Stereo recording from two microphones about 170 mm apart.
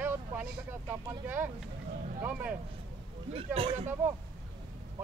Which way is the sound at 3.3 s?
35° right (ahead or behind).